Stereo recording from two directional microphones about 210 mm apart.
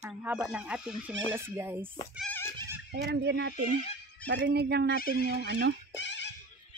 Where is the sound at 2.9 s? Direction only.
55° right (ahead or behind).